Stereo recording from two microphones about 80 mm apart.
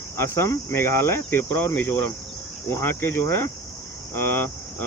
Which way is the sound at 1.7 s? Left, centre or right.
Left.